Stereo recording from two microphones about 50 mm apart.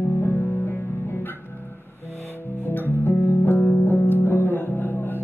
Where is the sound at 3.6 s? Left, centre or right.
Left.